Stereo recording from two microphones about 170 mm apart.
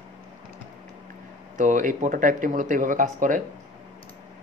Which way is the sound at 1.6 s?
50° right (ahead or behind).